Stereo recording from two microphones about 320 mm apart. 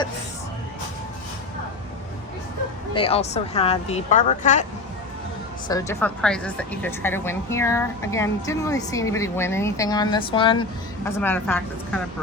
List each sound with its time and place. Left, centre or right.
2.9 s speech: centre
5.6 s a woman's voice: centre